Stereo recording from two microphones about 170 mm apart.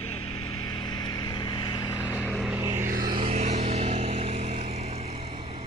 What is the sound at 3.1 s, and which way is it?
Vehicle, 35° right (ahead or behind).